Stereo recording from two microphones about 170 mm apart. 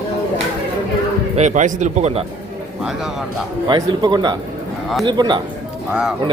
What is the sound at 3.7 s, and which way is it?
Speech, 25° right (ahead or behind).